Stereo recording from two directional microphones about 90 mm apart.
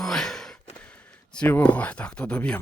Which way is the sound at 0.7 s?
15° left (ahead or behind).